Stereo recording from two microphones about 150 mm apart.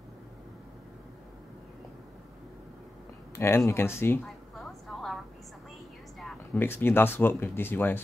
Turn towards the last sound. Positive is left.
turn(degrees=15)  # may be behind; listen again after turning